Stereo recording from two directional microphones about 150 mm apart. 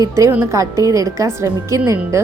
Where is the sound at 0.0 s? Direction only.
20° right (ahead or behind).